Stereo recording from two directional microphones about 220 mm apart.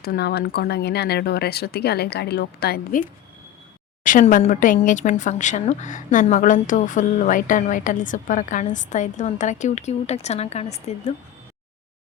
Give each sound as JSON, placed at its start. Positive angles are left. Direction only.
{"t": 0.0, "sound": "speech", "side_deg": 45}
{"t": 4.0, "sound": "speech", "side_deg": 35}